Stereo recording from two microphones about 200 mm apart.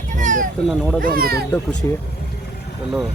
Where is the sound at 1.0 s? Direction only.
45° right (ahead or behind).